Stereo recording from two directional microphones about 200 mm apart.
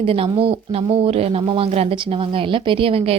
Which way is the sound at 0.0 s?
25° right (ahead or behind).